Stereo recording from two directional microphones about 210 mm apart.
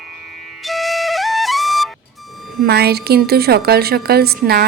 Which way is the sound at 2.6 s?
50° right (ahead or behind).